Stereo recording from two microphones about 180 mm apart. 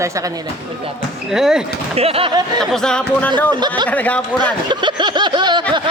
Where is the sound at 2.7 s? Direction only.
5° left (ahead or behind).